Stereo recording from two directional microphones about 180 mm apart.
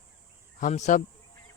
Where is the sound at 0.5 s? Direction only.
40° left (ahead or behind).